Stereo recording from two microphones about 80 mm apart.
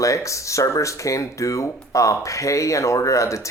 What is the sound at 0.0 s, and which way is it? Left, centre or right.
Speech, left.